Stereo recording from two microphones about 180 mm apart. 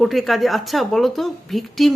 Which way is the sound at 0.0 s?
Centre (ahead or behind).